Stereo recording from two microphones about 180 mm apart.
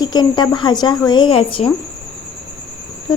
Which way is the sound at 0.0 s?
25° left (ahead or behind).